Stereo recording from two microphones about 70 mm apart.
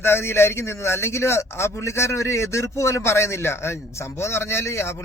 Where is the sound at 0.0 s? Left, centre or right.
Left.